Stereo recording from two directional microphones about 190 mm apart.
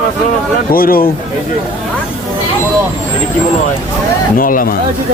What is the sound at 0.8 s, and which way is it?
Speech, 50° left (ahead or behind).